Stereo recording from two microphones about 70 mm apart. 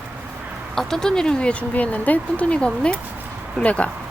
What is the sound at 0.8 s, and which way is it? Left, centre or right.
Speech, centre.